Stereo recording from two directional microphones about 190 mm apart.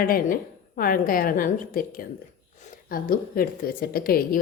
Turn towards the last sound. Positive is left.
turn(degrees=50)  # may be behind; listen again after turning